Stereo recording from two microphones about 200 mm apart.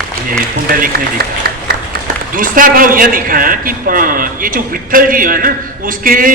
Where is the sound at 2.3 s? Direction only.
45° right (ahead or behind).